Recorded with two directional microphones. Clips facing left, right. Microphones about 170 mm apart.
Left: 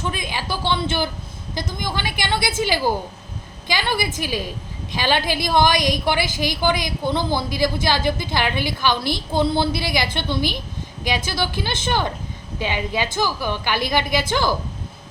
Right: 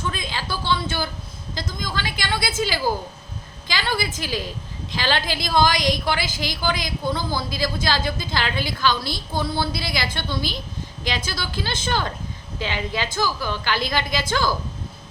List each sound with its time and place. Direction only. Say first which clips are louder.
0.0 s a woman's voice: left 2 dB; 15° left (ahead or behind)